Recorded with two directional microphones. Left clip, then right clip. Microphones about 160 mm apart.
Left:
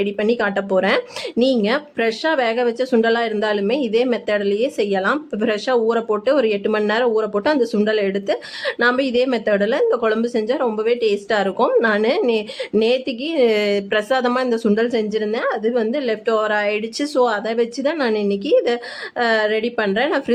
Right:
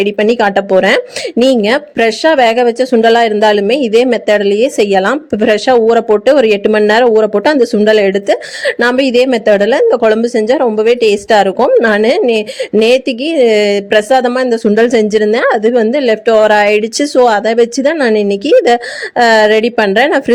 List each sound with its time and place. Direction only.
0.0 s speech: 40° right (ahead or behind)
14.8 s speech: 45° right (ahead or behind)